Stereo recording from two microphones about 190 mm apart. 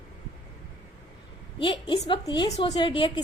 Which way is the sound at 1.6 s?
25° left (ahead or behind).